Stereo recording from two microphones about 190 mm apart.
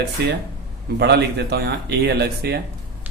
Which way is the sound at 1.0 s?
60° right (ahead or behind).